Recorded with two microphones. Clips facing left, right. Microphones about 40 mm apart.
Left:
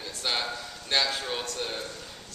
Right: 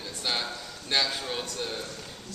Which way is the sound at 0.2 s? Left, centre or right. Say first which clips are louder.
Left 1 dB; centre.